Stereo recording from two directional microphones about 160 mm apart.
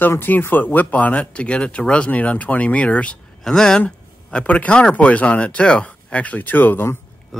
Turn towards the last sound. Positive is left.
turn(degrees=15)  # may be behind; listen again after turning